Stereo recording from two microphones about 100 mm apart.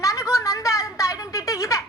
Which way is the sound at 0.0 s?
35° left (ahead or behind).